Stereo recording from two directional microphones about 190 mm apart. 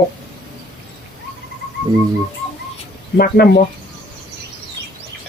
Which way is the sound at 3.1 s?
55° left (ahead or behind).